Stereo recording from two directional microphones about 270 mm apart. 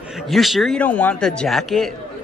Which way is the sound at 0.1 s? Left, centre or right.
Centre.